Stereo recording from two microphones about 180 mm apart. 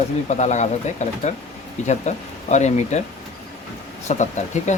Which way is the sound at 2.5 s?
40° left (ahead or behind).